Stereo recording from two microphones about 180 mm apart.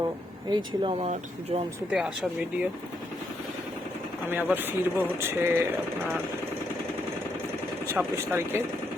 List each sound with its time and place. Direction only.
0.5 s speech: 30° right (ahead or behind)
1.9 s speech: 5° right (ahead or behind)
4.3 s speech: 10° right (ahead or behind)
7.9 s speech: 15° right (ahead or behind)